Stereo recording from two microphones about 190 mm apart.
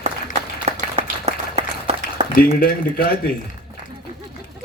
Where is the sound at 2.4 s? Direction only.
50° left (ahead or behind).